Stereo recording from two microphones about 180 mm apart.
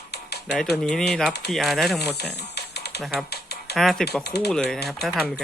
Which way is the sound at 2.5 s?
65° left (ahead or behind).